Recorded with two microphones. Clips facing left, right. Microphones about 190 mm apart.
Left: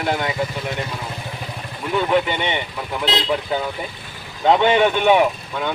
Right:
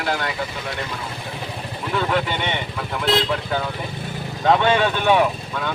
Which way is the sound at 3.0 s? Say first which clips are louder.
Right 1 dB; 20° left (ahead or behind).